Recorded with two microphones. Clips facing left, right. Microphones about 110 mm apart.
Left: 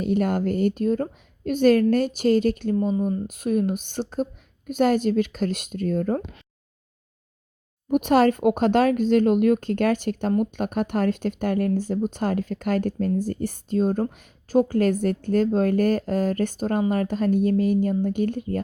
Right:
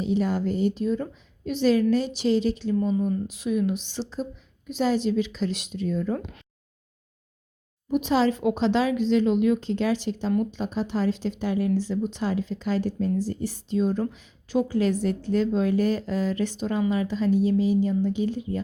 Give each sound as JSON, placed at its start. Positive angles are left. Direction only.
{"t": 0.0, "sound": "speech", "side_deg": 55}
{"t": 2.7, "sound": "speech", "side_deg": 35}
{"t": 3.2, "sound": "speech", "side_deg": 50}
{"t": 7.9, "sound": "speech", "side_deg": 55}